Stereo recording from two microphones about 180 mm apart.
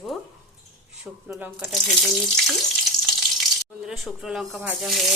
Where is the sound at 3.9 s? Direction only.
Centre (ahead or behind).